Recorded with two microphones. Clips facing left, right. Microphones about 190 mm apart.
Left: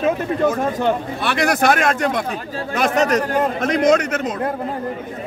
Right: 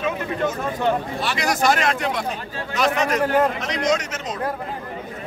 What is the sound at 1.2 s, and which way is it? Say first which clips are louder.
Speech: left 5 dB; 60° left (ahead or behind).